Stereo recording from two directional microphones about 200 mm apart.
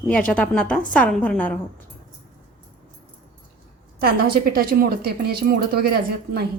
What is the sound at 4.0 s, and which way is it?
A woman's voice, 50° right (ahead or behind).